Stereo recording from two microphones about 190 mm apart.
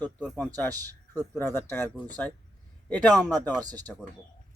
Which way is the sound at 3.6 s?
20° right (ahead or behind).